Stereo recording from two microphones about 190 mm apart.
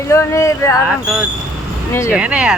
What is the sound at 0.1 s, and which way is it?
Speech, 15° left (ahead or behind).